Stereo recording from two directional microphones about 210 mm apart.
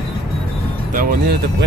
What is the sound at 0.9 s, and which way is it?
Speech, 40° right (ahead or behind).